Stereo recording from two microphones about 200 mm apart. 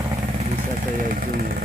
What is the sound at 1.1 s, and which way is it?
Speech, 45° right (ahead or behind).